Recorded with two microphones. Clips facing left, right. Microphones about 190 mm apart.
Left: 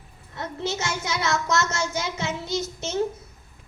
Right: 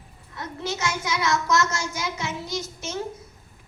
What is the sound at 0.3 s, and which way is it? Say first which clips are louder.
A child's voice: left 2 dB; 25° left (ahead or behind).